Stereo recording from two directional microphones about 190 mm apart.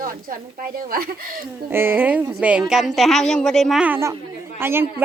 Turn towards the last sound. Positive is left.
turn(degrees=-10)  # may be behind; listen again after turning